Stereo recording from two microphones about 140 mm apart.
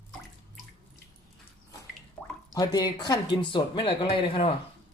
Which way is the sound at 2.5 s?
25° left (ahead or behind).